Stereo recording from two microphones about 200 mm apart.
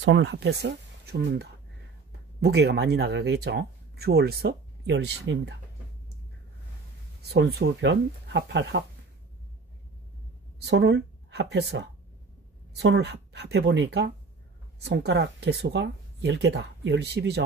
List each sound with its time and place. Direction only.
0.0 s speech: 65° right (ahead or behind)
7.2 s speech: 55° right (ahead or behind)
10.6 s speech: 55° right (ahead or behind)